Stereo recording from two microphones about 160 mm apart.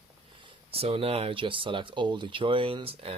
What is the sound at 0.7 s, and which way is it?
Speech, 35° right (ahead or behind).